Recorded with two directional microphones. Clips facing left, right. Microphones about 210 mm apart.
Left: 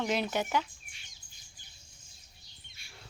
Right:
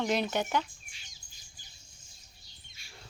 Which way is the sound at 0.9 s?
55° left (ahead or behind).